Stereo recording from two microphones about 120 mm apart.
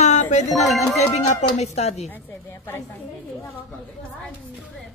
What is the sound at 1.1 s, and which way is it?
Speech, 70° left (ahead or behind).